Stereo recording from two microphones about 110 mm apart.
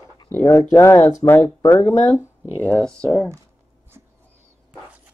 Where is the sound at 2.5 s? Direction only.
15° left (ahead or behind).